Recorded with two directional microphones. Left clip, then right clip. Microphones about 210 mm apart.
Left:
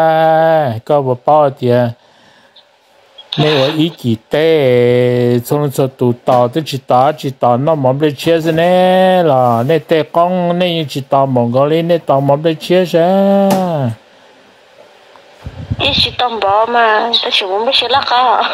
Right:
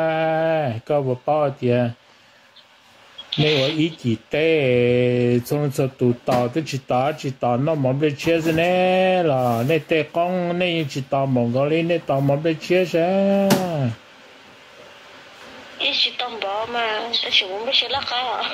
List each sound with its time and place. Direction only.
0.0 s speech: 30° left (ahead or behind)
3.8 s speech: 35° left (ahead or behind)
15.8 s speech: 55° left (ahead or behind)